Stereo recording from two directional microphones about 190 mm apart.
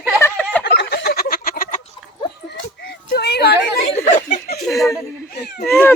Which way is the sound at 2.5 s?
60° left (ahead or behind).